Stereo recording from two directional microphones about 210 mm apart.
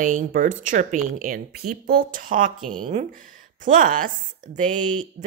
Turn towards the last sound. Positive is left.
turn(degrees=-35)  # may be behind; listen again after turning